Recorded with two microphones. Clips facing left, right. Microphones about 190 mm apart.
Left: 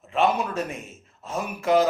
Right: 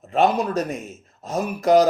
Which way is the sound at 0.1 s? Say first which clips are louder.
Right 4 dB; 40° right (ahead or behind).